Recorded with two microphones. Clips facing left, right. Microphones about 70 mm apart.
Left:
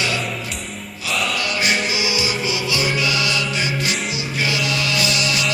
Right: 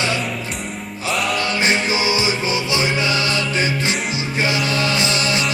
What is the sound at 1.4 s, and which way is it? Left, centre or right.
Music, right.